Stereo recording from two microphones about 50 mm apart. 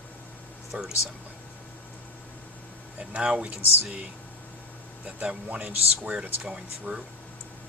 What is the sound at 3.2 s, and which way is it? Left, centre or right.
Speech, centre.